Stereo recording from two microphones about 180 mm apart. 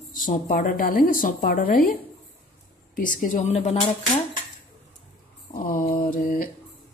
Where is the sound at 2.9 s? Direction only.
45° left (ahead or behind).